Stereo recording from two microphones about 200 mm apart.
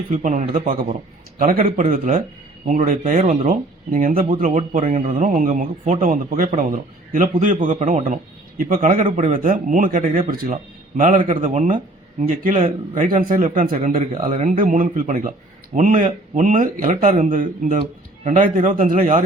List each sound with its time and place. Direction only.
0.1 s a man's voice: 35° right (ahead or behind)